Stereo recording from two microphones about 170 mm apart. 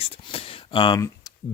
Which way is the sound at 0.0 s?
35° left (ahead or behind).